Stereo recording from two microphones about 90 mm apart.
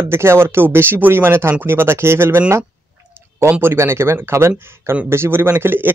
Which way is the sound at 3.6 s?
30° right (ahead or behind).